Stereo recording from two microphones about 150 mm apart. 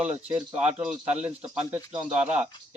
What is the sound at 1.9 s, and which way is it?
Speech, 30° right (ahead or behind).